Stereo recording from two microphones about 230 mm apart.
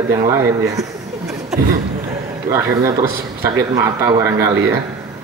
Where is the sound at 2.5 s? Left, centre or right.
Centre.